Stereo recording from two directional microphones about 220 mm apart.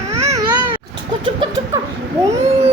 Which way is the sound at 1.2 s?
20° right (ahead or behind).